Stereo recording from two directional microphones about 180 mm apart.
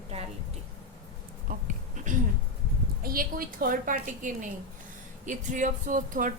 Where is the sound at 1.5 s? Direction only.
50° right (ahead or behind).